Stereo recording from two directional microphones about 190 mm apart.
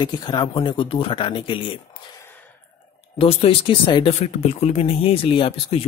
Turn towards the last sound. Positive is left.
turn(degrees=30)  # may be behind; listen again after turning